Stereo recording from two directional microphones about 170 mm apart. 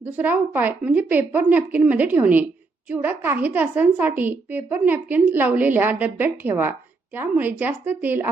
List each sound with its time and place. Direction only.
0.0 s a woman's voice: 10° right (ahead or behind)